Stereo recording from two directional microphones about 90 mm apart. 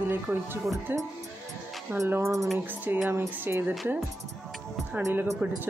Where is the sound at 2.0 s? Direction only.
25° right (ahead or behind).